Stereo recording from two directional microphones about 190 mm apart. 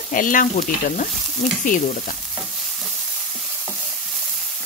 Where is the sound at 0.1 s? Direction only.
45° left (ahead or behind).